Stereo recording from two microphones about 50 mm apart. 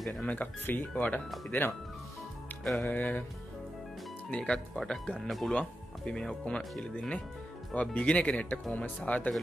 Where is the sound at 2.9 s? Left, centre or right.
Left.